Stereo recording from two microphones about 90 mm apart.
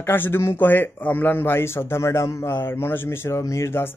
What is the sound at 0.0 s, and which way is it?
Speech, 25° left (ahead or behind).